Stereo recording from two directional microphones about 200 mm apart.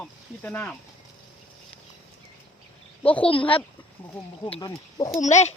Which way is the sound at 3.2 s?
25° left (ahead or behind).